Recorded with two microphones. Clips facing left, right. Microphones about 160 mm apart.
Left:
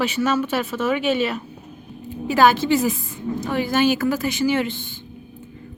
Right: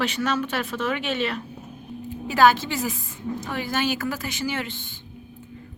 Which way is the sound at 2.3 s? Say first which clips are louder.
Left 3 dB; 15° left (ahead or behind).